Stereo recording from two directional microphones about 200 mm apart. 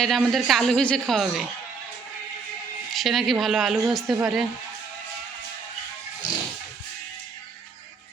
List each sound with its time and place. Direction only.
0.0 s speech: centre (ahead or behind)
2.9 s speech: centre (ahead or behind)